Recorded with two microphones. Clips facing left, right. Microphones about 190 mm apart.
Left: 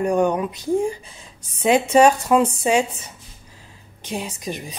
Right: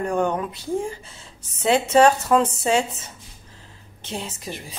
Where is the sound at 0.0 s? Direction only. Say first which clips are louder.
Left 4 dB; 15° left (ahead or behind).